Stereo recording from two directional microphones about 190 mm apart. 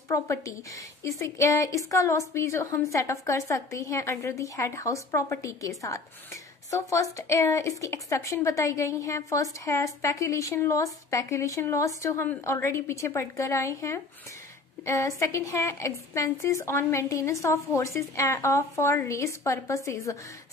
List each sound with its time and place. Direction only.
0.1 s a woman's voice: 15° left (ahead or behind)